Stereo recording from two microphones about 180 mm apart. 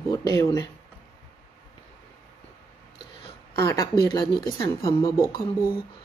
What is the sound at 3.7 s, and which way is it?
Speech, 20° left (ahead or behind).